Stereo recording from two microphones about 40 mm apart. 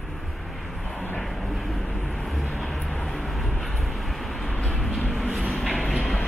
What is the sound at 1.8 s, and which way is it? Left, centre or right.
Vehicle, left.